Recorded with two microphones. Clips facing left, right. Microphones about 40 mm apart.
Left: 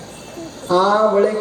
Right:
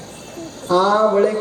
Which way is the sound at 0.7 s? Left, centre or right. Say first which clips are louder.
Even; centre.